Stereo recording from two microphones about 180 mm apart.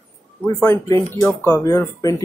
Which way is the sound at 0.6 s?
15° left (ahead or behind).